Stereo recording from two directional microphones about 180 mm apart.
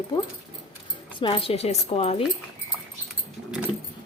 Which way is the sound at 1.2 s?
30° left (ahead or behind).